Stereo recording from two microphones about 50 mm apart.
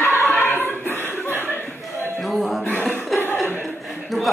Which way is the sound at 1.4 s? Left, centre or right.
Left.